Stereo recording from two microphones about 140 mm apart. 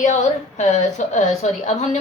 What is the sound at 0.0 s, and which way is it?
A woman's voice, 55° left (ahead or behind).